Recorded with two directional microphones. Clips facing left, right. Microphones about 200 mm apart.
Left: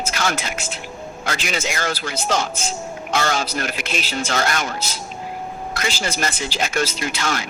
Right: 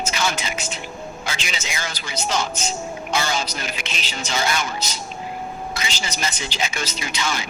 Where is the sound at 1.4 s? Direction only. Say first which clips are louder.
Left 6 dB; 55° left (ahead or behind).